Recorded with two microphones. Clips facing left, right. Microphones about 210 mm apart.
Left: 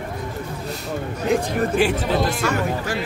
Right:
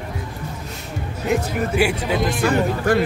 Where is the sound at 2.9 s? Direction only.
55° right (ahead or behind).